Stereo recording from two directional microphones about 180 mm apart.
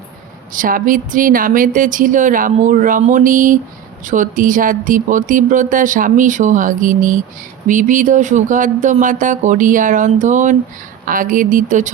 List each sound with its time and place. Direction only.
0.5 s speech: 50° right (ahead or behind)